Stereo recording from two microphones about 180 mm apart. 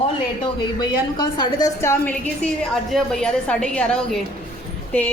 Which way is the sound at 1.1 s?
25° left (ahead or behind).